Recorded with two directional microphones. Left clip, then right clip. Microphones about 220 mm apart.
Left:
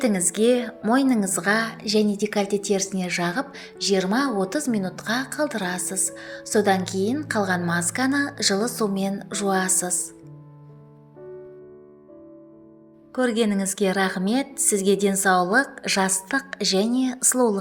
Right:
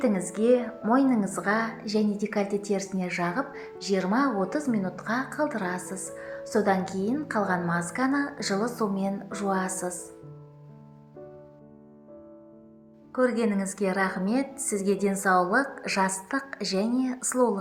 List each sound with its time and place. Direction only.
0.0 s a woman's voice: 35° left (ahead or behind)
13.1 s a woman's voice: 35° left (ahead or behind)